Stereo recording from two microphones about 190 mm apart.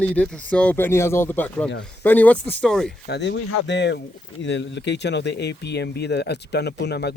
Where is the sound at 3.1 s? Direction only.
65° left (ahead or behind).